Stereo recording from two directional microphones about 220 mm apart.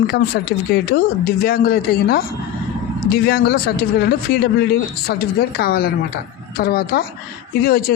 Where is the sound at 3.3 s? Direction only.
45° left (ahead or behind).